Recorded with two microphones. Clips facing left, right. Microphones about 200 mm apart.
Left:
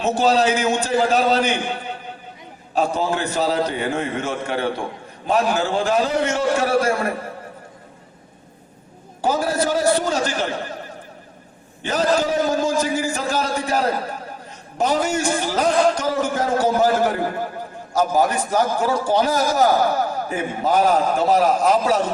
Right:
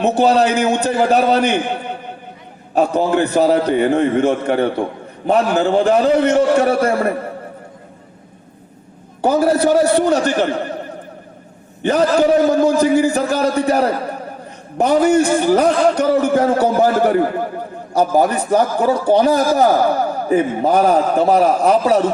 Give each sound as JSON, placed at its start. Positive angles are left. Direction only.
{"t": 0.0, "sound": "a man's voice", "side_deg": -60}
{"t": 9.2, "sound": "a man's voice", "side_deg": -60}
{"t": 11.8, "sound": "a man's voice", "side_deg": -60}